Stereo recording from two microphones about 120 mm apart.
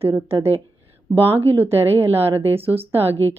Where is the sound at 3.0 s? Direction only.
60° right (ahead or behind).